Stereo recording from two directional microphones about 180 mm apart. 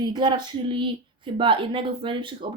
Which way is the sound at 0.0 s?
25° right (ahead or behind).